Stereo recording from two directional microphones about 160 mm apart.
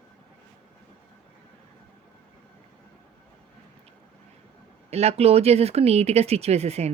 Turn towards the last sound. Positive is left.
turn(degrees=-40)  # may be behind; listen again after turning